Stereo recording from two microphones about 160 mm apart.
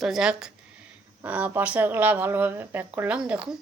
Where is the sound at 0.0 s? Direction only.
5° right (ahead or behind).